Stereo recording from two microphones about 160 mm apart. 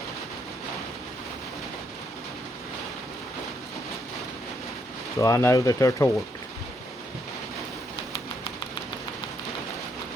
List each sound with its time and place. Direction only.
5.1 s speech: 20° left (ahead or behind)